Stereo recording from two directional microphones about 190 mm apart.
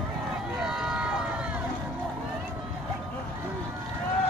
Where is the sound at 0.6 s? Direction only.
5° right (ahead or behind).